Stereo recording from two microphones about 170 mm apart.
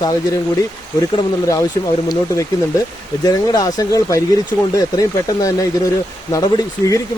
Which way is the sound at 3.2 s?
20° left (ahead or behind).